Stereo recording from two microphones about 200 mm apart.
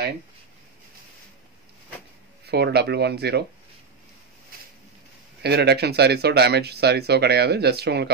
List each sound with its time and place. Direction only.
2.4 s speech: 55° right (ahead or behind)
5.4 s speech: 55° right (ahead or behind)